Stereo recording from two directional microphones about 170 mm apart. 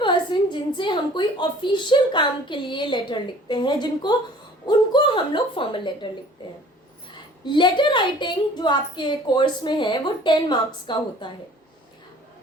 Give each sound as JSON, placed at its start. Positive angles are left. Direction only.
{"t": 0.0, "sound": "a woman's voice", "side_deg": 30}
{"t": 7.4, "sound": "a woman's voice", "side_deg": 30}